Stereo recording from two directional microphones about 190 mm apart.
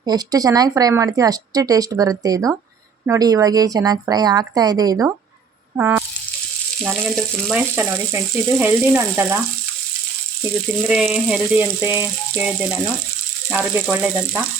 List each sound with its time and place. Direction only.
0.0 s speech: 20° right (ahead or behind)
5.7 s rattle: 10° right (ahead or behind)
6.8 s frying: centre (ahead or behind)
7.8 s speech: 10° right (ahead or behind)
10.7 s speech: 5° right (ahead or behind)